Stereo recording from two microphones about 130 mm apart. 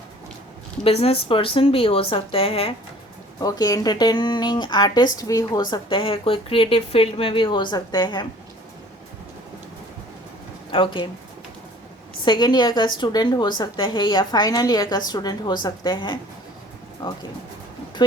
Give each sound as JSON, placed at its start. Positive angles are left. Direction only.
{"t": 0.9, "sound": "a woman's voice", "side_deg": 50}
{"t": 3.4, "sound": "a woman's voice", "side_deg": 30}
{"t": 10.7, "sound": "speech", "side_deg": 40}
{"t": 12.2, "sound": "a woman's voice", "side_deg": 35}